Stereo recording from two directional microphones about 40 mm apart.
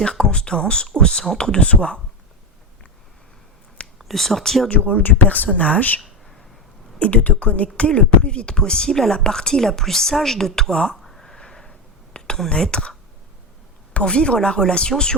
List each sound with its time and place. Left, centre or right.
0.0 s speech: left
1.6 s speech: left
3.9 s speech: centre
4.7 s speech: left
7.0 s speech: left; by 10.9 s centre
11.0 s a sound: centre
11.3 s a sound: centre
12.1 s whispering: left
12.6 s speech: left
13.9 s speech: left